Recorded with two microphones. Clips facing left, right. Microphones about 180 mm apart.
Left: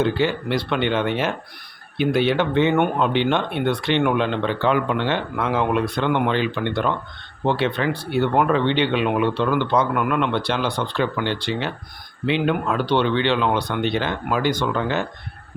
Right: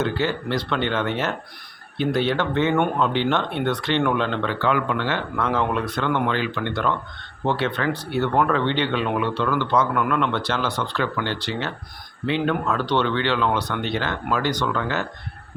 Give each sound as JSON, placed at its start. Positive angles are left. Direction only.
{"t": 0.0, "sound": "speech", "side_deg": 15}